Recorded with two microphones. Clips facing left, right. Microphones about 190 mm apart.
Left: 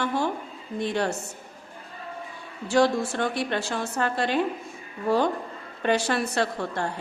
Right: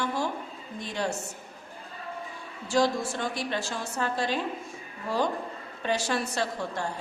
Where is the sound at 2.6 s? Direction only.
65° left (ahead or behind).